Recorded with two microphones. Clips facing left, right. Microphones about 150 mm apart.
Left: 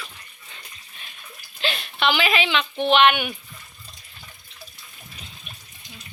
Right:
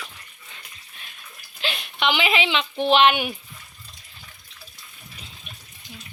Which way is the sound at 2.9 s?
30° right (ahead or behind).